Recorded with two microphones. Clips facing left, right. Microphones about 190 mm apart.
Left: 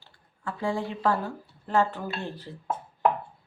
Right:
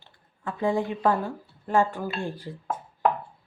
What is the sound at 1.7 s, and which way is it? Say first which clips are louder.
Speech: right 2 dB; 15° right (ahead or behind).